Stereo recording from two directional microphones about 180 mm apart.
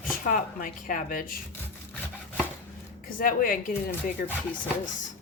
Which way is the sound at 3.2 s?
50° left (ahead or behind).